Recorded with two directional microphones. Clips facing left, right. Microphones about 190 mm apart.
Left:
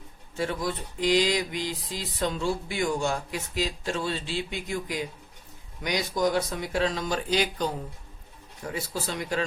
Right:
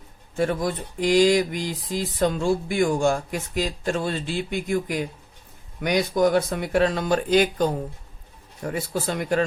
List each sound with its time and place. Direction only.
0.3 s speech: 50° right (ahead or behind)